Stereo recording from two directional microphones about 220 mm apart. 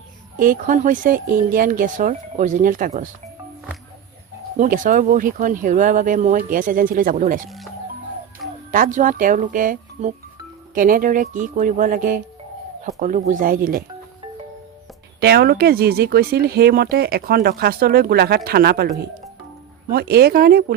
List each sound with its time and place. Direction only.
0.3 s speech: 40° right (ahead or behind)
4.5 s speech: 35° right (ahead or behind)
8.7 s speech: 35° right (ahead or behind)
15.2 s speech: 45° right (ahead or behind)
19.9 s speech: 45° right (ahead or behind)